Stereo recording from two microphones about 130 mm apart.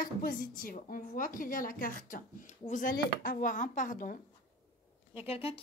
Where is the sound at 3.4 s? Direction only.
80° left.